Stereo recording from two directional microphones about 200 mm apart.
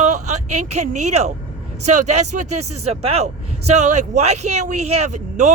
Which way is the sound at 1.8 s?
35° right (ahead or behind).